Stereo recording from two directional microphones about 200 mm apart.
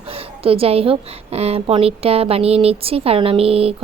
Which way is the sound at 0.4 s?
30° right (ahead or behind).